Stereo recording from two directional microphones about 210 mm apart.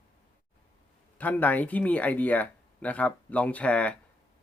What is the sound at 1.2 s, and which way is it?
Speech, 10° left (ahead or behind).